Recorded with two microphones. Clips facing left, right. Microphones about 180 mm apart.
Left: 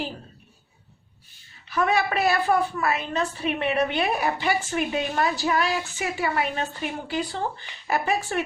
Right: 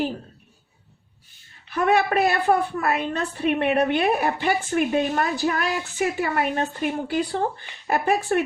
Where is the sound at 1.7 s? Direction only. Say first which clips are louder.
Right 3 dB; 55° right (ahead or behind).